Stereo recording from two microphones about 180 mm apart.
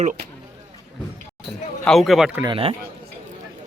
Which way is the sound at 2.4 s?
30° right (ahead or behind).